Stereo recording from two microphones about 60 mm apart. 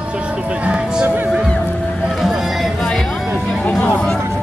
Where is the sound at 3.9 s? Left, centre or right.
Centre.